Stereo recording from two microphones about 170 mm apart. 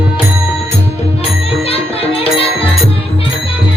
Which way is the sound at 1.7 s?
35° left (ahead or behind).